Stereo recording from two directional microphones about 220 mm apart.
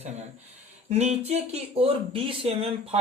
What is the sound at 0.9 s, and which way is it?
Speech, 30° right (ahead or behind).